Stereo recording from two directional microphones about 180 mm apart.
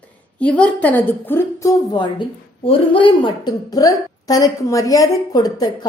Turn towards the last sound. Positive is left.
turn(degrees=20)  # may be behind; listen again after turning